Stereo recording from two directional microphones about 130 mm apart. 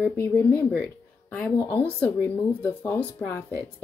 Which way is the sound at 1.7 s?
10° left (ahead or behind).